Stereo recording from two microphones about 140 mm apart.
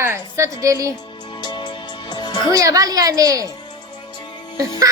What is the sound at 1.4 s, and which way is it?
Music, 30° left (ahead or behind).